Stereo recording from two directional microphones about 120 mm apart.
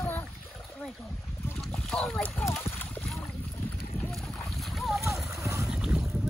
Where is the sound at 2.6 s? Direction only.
15° left (ahead or behind).